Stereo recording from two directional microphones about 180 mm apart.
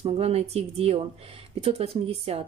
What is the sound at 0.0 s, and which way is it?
Speech, 35° right (ahead or behind).